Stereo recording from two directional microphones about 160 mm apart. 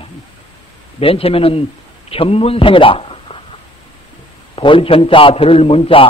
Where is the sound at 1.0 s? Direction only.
35° left (ahead or behind).